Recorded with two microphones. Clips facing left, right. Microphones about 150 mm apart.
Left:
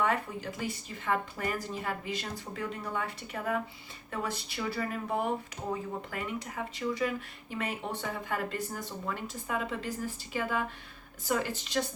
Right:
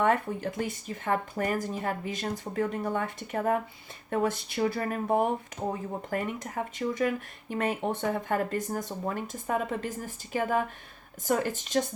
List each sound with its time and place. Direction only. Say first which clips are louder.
0.0 s speech: right 5 dB; 50° right (ahead or behind)